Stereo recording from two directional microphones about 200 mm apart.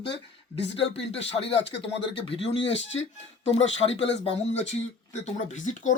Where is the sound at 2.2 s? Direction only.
25° left (ahead or behind).